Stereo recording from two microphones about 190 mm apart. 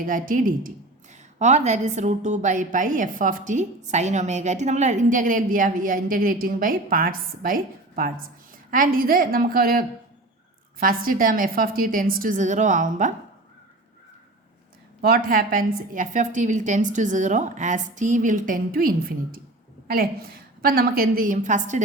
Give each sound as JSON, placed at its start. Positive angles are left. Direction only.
{"t": 0.0, "sound": "a woman's voice", "side_deg": -45}
{"t": 15.0, "sound": "a woman's voice", "side_deg": -50}